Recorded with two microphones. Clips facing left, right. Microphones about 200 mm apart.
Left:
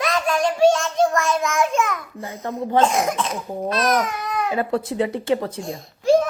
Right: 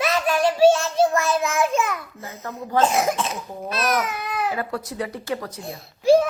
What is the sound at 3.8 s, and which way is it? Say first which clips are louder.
Babbling: left 1 dB; 5° right (ahead or behind).